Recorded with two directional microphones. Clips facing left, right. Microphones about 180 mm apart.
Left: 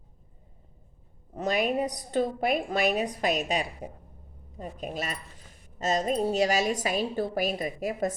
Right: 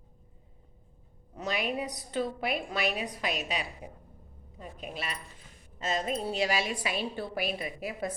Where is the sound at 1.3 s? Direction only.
45° left (ahead or behind).